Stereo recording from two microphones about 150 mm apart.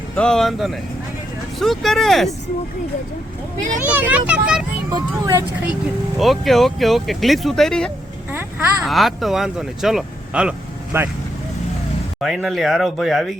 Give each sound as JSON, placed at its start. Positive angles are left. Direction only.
{"t": 0.2, "sound": "speech", "side_deg": 5}
{"t": 3.8, "sound": "speech", "side_deg": -10}
{"t": 4.9, "sound": "speech", "side_deg": -25}
{"t": 6.1, "sound": "speech", "side_deg": 0}
{"t": 8.3, "sound": "vehicle", "side_deg": -15}
{"t": 8.8, "sound": "speech", "side_deg": 0}
{"t": 10.9, "sound": "speech", "side_deg": -15}
{"t": 12.2, "sound": "speech", "side_deg": 0}